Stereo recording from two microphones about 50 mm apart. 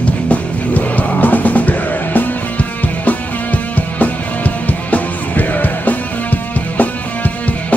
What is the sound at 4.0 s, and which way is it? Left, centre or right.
Music, left.